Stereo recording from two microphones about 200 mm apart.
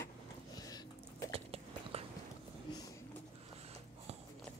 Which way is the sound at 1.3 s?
30° right (ahead or behind).